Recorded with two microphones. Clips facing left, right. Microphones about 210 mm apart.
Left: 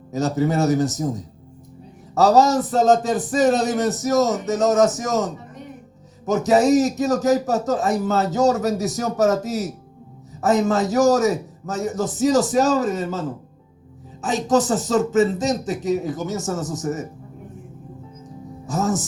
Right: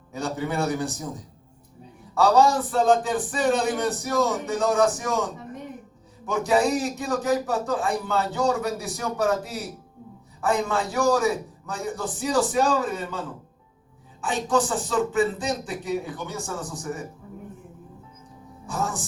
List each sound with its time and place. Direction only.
0.1 s a man's voice: 40° left (ahead or behind)
2.1 s a man's voice: 40° left (ahead or behind)
18.6 s speech: 40° left (ahead or behind)